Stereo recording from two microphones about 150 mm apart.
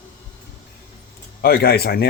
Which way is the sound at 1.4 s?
90° left.